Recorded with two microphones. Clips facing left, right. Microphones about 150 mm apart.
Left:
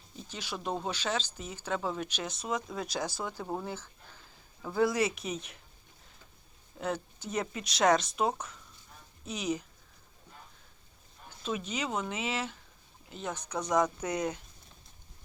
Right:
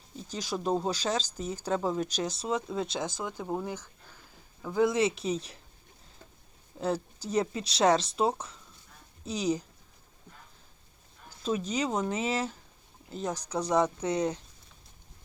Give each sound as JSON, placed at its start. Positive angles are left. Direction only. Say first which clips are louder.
{"t": 0.3, "sound": "speech", "louder": "right 6 dB", "side_deg": -40}
{"t": 6.7, "sound": "speech", "louder": "right 4 dB", "side_deg": -35}
{"t": 11.3, "sound": "speech", "louder": "right 4 dB", "side_deg": -40}